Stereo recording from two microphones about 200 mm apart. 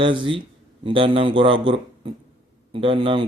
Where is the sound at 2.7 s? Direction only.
25° right (ahead or behind).